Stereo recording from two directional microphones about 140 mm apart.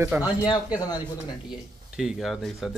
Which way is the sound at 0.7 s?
25° left (ahead or behind).